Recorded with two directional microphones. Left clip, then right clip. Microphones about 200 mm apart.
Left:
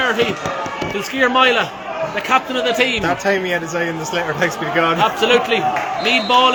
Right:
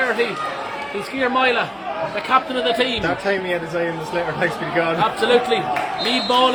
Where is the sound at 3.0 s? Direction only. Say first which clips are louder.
Left 3 dB; 40° left (ahead or behind).